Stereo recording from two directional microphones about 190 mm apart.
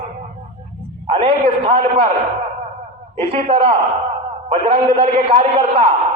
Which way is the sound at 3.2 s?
30° right (ahead or behind).